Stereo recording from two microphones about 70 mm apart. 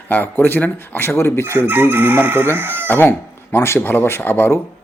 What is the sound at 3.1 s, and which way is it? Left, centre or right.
Speech, left.